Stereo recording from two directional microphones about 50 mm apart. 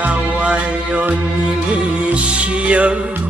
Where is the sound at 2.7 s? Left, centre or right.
Right.